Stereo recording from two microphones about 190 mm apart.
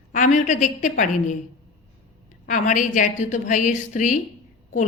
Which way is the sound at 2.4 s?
45° left (ahead or behind).